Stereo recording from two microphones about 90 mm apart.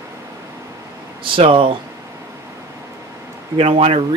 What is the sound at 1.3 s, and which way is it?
Speech, 75° right (ahead or behind).